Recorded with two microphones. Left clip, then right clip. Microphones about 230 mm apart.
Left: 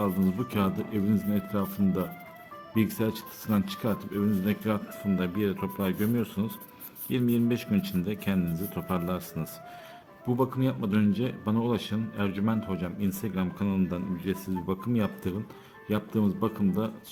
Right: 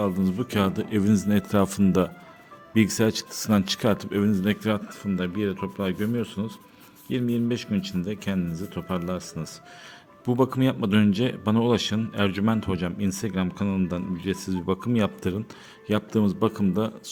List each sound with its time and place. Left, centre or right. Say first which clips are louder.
0.0 s speech: right 3 dB; centre
5.0 s speech: right 1 dB; centre
10.2 s speech: right 5 dB; right